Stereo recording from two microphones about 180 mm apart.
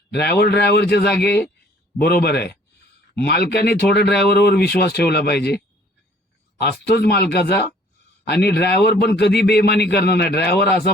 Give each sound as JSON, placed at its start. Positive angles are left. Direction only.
{"t": 0.1, "sound": "a man's voice", "side_deg": 65}
{"t": 6.6, "sound": "a man's voice", "side_deg": 60}